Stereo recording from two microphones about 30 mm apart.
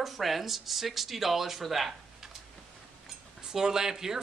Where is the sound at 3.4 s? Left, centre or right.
Right.